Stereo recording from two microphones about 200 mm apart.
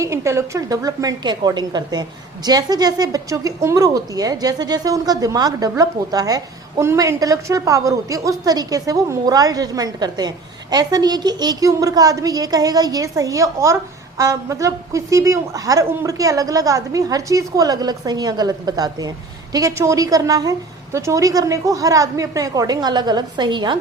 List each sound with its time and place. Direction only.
0.0 s a woman's voice: 15° right (ahead or behind)